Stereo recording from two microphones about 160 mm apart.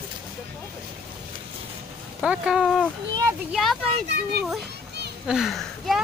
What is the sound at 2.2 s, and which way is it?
Speech, 5° right (ahead or behind).